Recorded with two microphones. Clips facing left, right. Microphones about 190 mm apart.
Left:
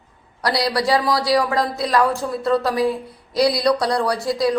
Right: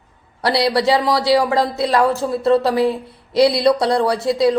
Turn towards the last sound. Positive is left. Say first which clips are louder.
# right 4 dB
turn(degrees=-25)  # may be behind; listen again after turning